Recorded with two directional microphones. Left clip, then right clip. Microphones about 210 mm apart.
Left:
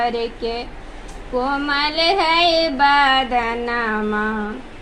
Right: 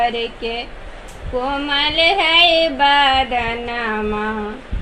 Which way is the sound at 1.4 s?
20° left (ahead or behind).